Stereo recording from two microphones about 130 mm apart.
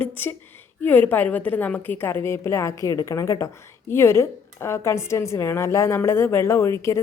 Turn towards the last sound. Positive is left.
turn(degrees=20)  # may be behind; listen again after turning